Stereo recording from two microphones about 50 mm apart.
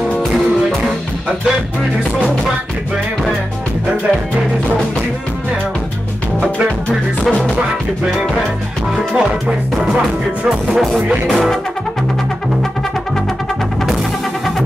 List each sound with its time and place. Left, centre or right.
7.2 s music: centre
10.7 s music: centre